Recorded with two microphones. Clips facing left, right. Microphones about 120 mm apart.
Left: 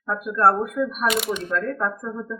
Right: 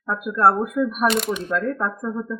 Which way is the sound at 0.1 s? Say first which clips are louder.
Right 1 dB; 15° right (ahead or behind).